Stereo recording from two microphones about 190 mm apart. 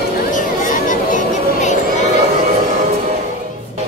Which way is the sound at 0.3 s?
40° left (ahead or behind).